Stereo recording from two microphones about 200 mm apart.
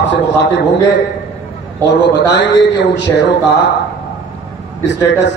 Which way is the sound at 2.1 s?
65° left (ahead or behind).